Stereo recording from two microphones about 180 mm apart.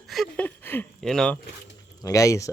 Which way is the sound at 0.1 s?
5° left (ahead or behind).